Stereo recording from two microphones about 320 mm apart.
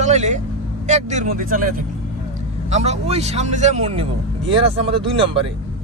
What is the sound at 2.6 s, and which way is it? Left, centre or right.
Speech, right.